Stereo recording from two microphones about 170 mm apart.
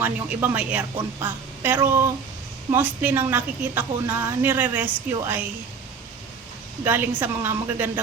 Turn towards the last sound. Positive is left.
turn(degrees=-10)  # may be behind; listen again after turning